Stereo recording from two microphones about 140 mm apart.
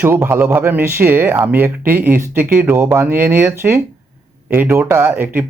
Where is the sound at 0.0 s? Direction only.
15° right (ahead or behind).